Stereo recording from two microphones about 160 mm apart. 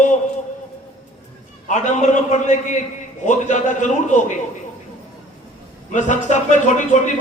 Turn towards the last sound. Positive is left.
turn(degrees=50)  # may be behind; listen again after turning